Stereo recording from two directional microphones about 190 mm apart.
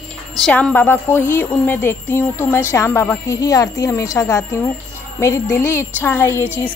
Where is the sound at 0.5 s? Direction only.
5° left (ahead or behind).